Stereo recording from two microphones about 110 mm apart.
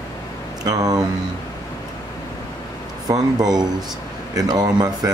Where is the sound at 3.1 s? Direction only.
35° right (ahead or behind).